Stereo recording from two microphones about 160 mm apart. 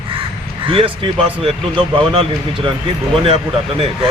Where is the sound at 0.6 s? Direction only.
35° right (ahead or behind).